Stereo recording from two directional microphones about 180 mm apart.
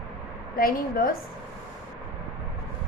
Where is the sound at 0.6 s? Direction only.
55° left (ahead or behind).